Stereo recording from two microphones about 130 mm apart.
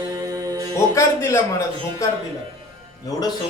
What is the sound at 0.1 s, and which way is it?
Music, 25° right (ahead or behind).